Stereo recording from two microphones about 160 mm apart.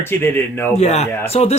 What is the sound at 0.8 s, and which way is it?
Speech, 45° left (ahead or behind).